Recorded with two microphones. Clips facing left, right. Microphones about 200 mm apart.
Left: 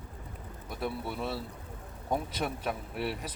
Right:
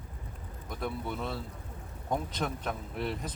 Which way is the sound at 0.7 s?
10° left (ahead or behind).